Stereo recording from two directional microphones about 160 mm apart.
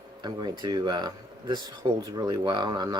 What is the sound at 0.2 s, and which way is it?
Speech, 25° right (ahead or behind).